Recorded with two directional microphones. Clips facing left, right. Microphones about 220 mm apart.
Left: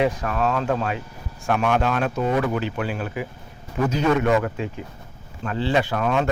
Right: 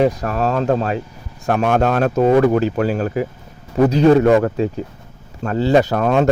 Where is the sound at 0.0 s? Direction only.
40° right (ahead or behind).